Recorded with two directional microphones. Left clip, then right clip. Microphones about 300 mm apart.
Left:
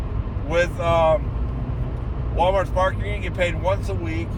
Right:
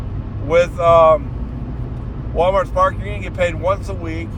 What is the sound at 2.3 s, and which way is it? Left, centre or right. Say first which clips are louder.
Speech: right 4 dB; centre.